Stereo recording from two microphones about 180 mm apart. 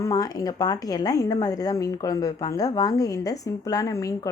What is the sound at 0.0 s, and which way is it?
A woman's voice, 20° left (ahead or behind).